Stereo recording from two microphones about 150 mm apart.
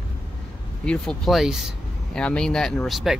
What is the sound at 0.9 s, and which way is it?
Speech, centre (ahead or behind).